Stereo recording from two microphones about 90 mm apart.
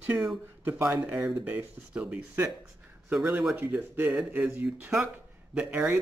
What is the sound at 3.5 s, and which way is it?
Speech, 25° right (ahead or behind).